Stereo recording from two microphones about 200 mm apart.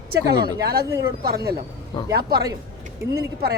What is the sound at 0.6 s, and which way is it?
Speech, 50° right (ahead or behind).